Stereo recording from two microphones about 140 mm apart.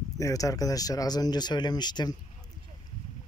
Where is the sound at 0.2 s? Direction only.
25° left (ahead or behind).